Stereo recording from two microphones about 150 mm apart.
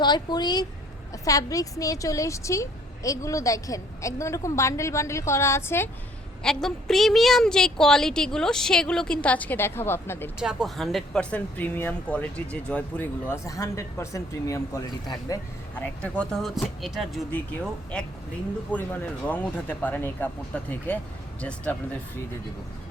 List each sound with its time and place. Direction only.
0.0 s a woman's voice: 30° left (ahead or behind)
6.4 s a woman's voice: 5° left (ahead or behind)
10.4 s speech: centre (ahead or behind); by 15.4 s 25° left (ahead or behind)
15.8 s a woman's voice: 10° left (ahead or behind)